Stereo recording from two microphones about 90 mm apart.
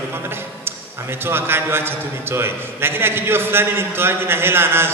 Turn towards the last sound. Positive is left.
turn(degrees=-25)  # may be behind; listen again after turning